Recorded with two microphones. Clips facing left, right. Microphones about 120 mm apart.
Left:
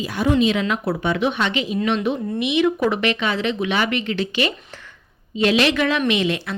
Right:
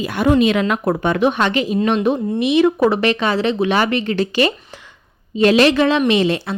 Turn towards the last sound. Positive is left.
turn(degrees=-35)  # may be behind; listen again after turning